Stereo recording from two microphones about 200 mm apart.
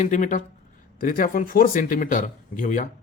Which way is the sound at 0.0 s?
40° left (ahead or behind).